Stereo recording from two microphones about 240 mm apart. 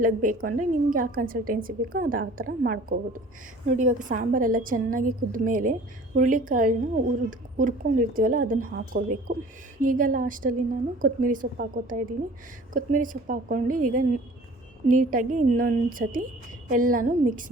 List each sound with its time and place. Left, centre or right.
0.0 s a woman's voice: right